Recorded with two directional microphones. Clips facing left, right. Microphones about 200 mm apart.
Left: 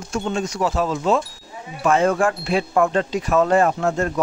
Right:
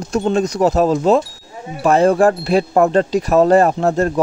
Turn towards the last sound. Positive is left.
turn(degrees=-35)  # may be behind; listen again after turning